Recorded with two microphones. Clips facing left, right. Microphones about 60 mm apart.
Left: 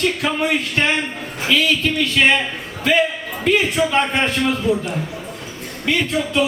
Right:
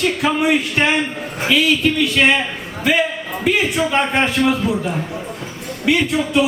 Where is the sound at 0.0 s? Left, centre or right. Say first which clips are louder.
Right 2 dB; centre.